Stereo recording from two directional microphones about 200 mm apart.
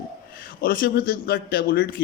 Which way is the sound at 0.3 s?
45° left (ahead or behind).